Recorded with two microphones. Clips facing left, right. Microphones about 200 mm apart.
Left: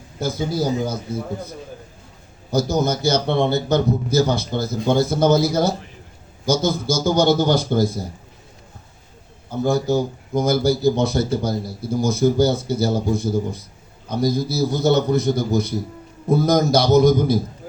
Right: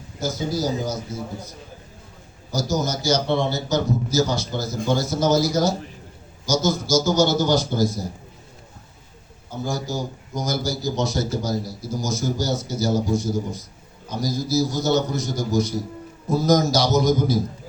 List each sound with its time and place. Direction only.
0.2 s a man's voice: 55° left (ahead or behind)
9.6 s a man's voice: 60° left (ahead or behind)